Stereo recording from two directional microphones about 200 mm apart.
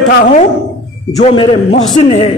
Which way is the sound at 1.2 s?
30° left (ahead or behind).